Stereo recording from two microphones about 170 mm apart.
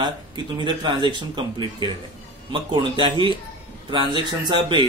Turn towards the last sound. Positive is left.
turn(degrees=-25)  # may be behind; listen again after turning